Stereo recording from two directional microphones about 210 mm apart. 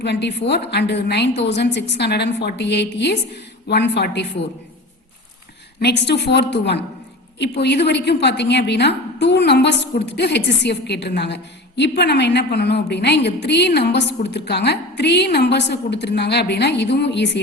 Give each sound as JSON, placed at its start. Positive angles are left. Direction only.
{"t": 0.0, "sound": "a woman's voice", "side_deg": 55}
{"t": 5.8, "sound": "a woman's voice", "side_deg": 55}